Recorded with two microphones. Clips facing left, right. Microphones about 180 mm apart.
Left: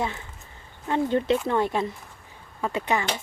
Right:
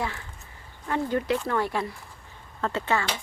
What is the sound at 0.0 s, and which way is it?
Speech, 20° left (ahead or behind).